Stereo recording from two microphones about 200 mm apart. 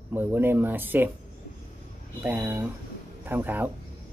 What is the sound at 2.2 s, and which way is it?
Speech, 10° right (ahead or behind).